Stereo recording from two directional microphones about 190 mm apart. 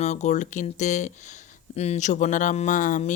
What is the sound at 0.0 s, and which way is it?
Speech, 35° left (ahead or behind).